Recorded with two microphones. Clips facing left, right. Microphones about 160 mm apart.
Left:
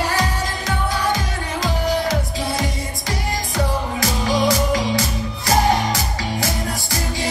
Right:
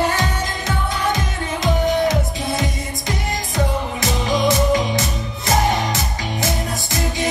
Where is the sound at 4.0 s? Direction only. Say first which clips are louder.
Left 1 dB; 25° right (ahead or behind).